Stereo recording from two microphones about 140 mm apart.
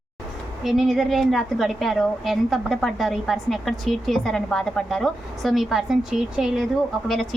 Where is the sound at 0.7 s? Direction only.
Centre (ahead or behind).